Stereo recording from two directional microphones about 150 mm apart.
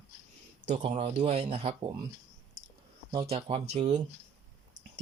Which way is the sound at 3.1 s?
40° right (ahead or behind).